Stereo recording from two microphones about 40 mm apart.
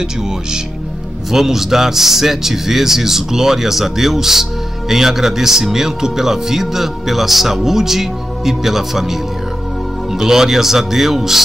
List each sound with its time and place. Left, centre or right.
1.3 s speech: centre